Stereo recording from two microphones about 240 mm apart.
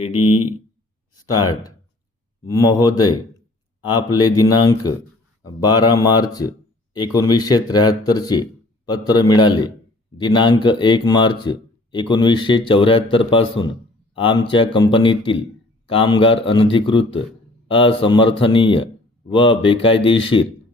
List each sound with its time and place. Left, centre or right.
0.2 s speech: left
2.4 s speech: centre